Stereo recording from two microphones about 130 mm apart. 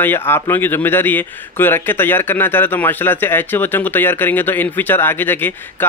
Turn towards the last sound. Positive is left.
turn(degrees=15)  # may be behind; listen again after turning